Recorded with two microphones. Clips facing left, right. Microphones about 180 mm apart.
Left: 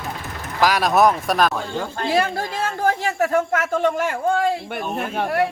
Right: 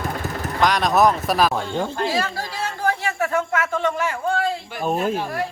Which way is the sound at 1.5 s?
25° right (ahead or behind).